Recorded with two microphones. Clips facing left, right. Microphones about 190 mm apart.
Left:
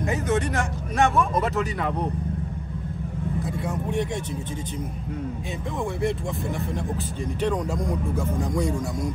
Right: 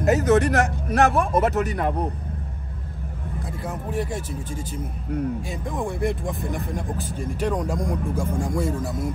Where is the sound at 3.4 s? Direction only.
Centre (ahead or behind).